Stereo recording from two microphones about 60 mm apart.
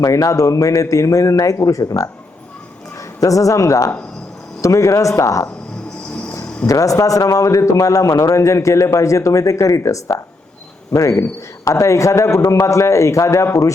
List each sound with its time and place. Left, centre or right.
0.0 s a man's voice: left
3.2 s a man's voice: left
6.7 s a man's voice: left